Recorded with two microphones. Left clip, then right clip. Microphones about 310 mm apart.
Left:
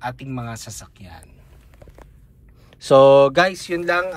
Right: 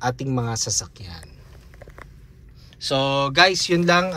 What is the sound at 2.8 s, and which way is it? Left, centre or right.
Speech, centre.